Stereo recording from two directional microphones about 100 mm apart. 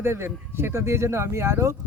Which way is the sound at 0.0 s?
25° right (ahead or behind).